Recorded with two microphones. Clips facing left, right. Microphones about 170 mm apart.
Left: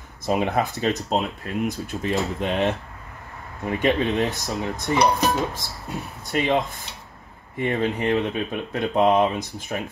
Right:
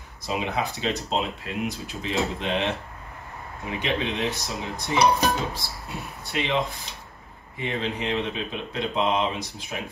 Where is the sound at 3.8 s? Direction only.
45° left (ahead or behind).